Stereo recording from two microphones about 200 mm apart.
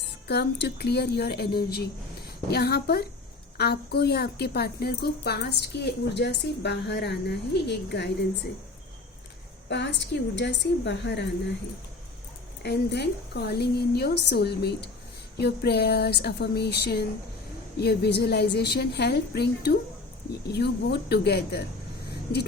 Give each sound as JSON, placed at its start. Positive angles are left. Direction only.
{"t": 0.3, "sound": "speech", "side_deg": 55}
{"t": 9.6, "sound": "speech", "side_deg": 60}
{"t": 12.6, "sound": "speech", "side_deg": 55}